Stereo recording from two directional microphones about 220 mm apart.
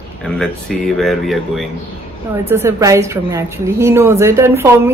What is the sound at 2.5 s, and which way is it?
A woman's voice, 15° right (ahead or behind).